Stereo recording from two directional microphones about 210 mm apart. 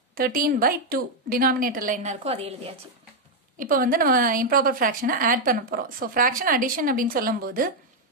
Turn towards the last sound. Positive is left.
turn(degrees=-45)  # may be behind; listen again after turning